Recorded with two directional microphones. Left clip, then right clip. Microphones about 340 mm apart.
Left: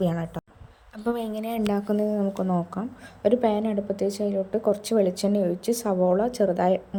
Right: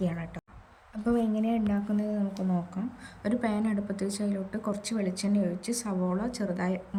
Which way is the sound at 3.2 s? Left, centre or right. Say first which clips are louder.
Left 9 dB; centre.